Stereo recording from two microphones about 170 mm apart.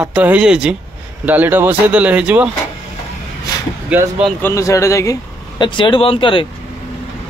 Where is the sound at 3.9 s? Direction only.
10° right (ahead or behind).